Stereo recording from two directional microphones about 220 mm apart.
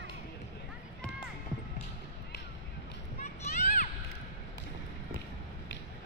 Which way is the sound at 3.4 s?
35° left (ahead or behind).